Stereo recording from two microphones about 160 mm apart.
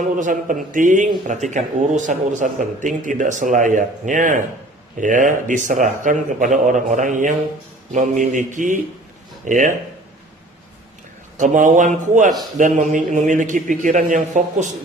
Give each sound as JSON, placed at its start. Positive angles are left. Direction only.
{"t": 0.1, "sound": "a man's voice", "side_deg": -55}
{"t": 11.3, "sound": "a man's voice", "side_deg": -50}